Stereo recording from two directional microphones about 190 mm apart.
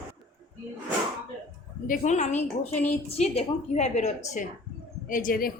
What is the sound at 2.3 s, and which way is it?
Speech, 10° left (ahead or behind).